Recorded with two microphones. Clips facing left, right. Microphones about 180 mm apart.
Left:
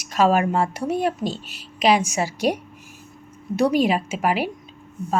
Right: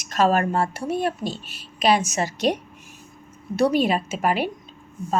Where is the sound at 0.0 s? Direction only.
10° left (ahead or behind).